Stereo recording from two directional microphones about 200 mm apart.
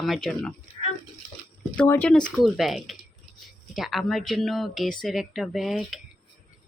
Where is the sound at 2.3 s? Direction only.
Centre (ahead or behind).